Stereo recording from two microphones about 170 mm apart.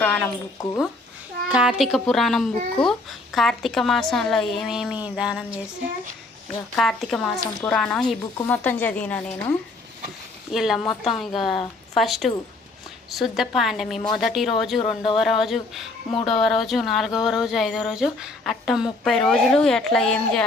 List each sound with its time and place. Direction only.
0.0 s a woman's voice: 10° left (ahead or behind)
1.5 s speech: 5° right (ahead or behind)
6.7 s a woman's voice: 5° left (ahead or behind)
10.8 s speech: 30° left (ahead or behind)
11.3 s speech: centre (ahead or behind)
14.8 s speech: 30° left (ahead or behind)
15.2 s speech: centre (ahead or behind)